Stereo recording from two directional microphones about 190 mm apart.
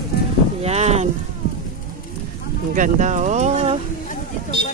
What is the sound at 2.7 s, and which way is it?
Speech, 40° right (ahead or behind).